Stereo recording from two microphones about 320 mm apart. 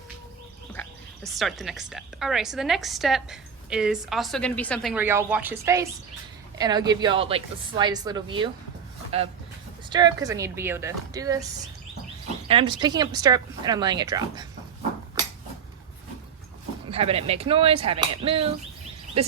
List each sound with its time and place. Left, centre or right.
0.7 s speech: centre
9.9 s speech: centre
16.9 s speech: centre
19.2 s a sound: centre